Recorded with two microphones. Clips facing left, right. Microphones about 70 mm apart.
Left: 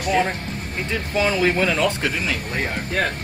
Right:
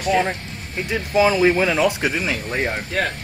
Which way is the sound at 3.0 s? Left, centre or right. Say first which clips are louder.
Even; centre.